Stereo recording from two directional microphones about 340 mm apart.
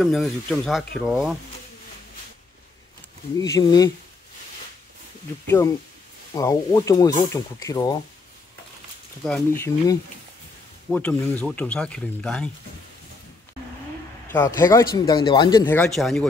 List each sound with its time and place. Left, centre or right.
0.0 s speech: centre
3.3 s speech: centre
6.3 s speech: centre
9.2 s speech: centre
14.3 s speech: centre